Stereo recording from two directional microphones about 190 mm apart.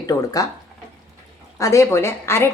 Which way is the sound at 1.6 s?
15° left (ahead or behind).